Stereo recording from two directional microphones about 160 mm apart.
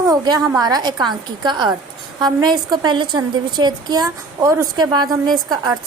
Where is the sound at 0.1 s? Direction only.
25° right (ahead or behind).